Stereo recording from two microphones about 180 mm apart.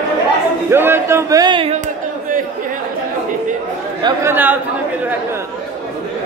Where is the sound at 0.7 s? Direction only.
15° right (ahead or behind).